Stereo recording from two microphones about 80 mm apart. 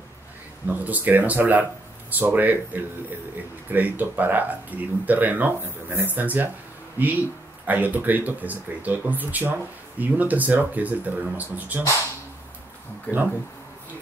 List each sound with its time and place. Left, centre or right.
0.7 s speech: right
7.6 s speech: right
13.1 s speech: left